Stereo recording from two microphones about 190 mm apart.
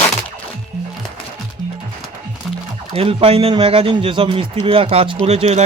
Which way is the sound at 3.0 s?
30° right (ahead or behind).